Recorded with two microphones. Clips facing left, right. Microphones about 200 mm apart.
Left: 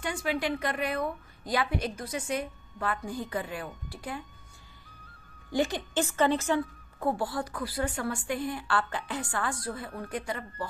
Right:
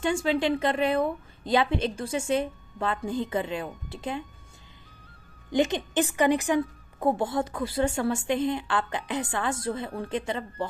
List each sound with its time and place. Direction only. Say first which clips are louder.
0.0 s a woman's voice: right 6 dB; 25° right (ahead or behind)
5.5 s a woman's voice: right 4 dB; 20° right (ahead or behind)